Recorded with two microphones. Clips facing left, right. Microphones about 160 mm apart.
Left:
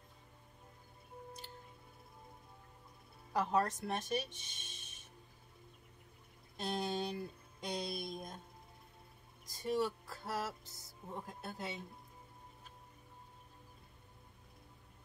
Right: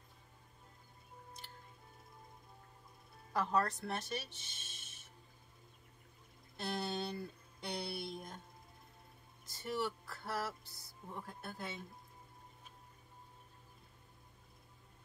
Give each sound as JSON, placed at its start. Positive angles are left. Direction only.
{"t": 3.3, "sound": "speech", "side_deg": 15}
{"t": 6.5, "sound": "music", "side_deg": 15}
{"t": 9.5, "sound": "speech", "side_deg": 15}